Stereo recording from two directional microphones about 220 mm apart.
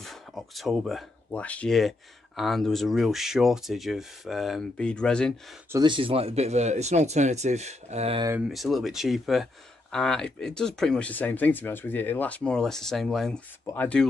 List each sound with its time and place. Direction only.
0.0 s speech: centre (ahead or behind)
5.7 s speech: 20° right (ahead or behind)
8.3 s speech: 5° right (ahead or behind)